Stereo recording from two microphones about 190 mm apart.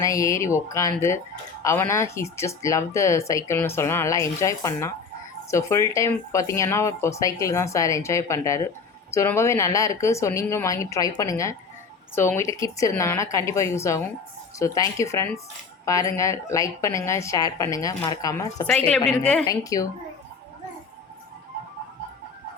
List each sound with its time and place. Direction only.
0.0 s speech: 15° left (ahead or behind)
18.7 s a woman's voice: 5° left (ahead or behind)
19.5 s speech: 15° left (ahead or behind)